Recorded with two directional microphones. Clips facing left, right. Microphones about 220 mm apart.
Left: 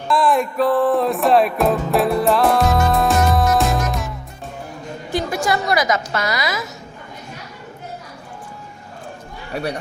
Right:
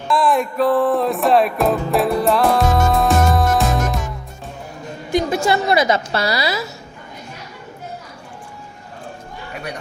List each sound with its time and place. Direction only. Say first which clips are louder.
0.1 s music: even; centre (ahead or behind)
5.1 s a woman's voice: right 3 dB; 25° right (ahead or behind)